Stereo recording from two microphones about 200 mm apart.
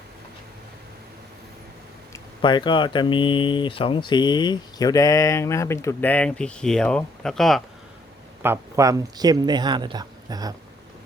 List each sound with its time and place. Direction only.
2.1 s speech: 20° left (ahead or behind); by 7.6 s centre (ahead or behind)
8.4 s speech: 15° right (ahead or behind)